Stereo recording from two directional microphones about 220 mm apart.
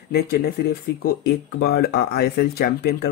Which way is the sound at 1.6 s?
45° left (ahead or behind).